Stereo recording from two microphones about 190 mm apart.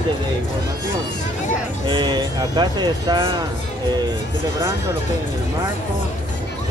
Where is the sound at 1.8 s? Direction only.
25° right (ahead or behind).